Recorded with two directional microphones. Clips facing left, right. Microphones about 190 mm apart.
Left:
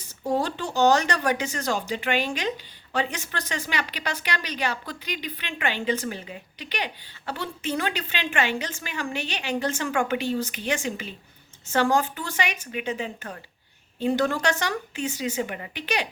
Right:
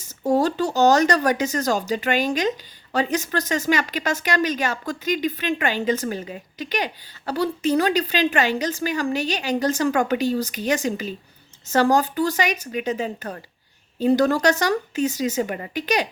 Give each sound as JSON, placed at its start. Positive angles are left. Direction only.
{"t": 0.0, "sound": "a woman's voice", "side_deg": -45}